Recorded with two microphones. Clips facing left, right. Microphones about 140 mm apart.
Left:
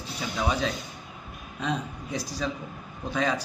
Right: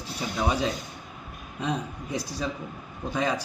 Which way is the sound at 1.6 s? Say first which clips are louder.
Right 1 dB; 10° right (ahead or behind).